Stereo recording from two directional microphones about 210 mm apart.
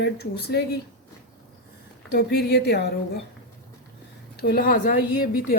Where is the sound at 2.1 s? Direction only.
50° left (ahead or behind).